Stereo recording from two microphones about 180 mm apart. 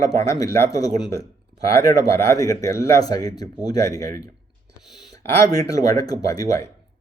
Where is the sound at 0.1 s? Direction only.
20° left (ahead or behind).